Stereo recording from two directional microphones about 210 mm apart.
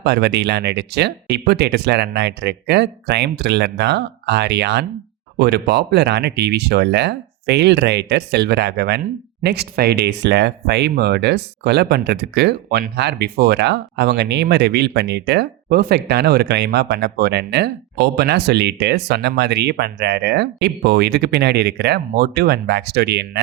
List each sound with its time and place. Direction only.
0.0 s speech: 50° right (ahead or behind)